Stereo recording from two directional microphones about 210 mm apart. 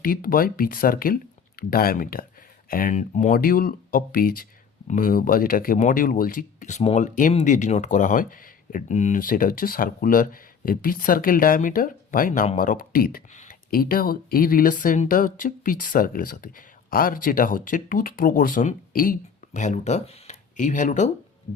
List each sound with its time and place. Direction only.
0.0 s speech: 45° left (ahead or behind)